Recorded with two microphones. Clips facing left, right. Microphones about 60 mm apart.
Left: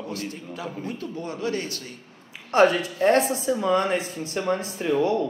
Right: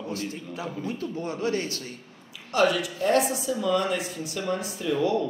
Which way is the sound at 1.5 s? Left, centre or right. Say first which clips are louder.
Right 1 dB; left.